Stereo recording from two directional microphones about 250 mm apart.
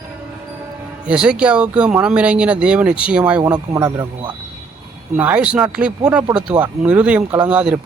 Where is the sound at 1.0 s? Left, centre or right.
Centre.